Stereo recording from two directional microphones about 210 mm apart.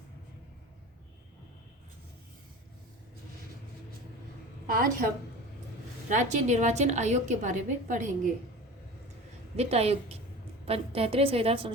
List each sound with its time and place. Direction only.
4.6 s a woman's voice: 40° right (ahead or behind)
6.1 s a woman's voice: 35° right (ahead or behind)
9.6 s a woman's voice: 30° right (ahead or behind)